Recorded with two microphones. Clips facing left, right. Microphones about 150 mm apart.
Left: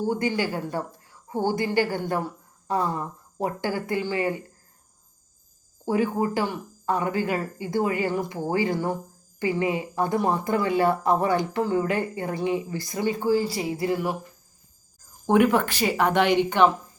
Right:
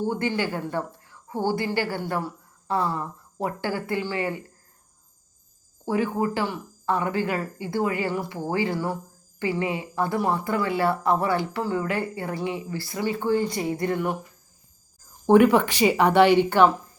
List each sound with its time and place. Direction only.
0.1 s a woman's voice: 15° left (ahead or behind)
5.8 s a woman's voice: 15° left (ahead or behind)
15.4 s speech: 10° right (ahead or behind)